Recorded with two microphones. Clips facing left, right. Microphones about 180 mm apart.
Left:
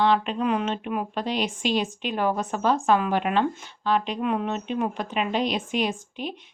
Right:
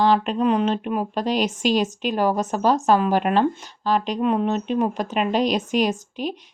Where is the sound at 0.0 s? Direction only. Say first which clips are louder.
Right 3 dB; 40° right (ahead or behind).